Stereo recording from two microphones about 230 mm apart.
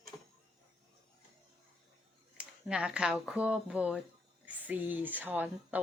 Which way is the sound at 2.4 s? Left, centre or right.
Centre.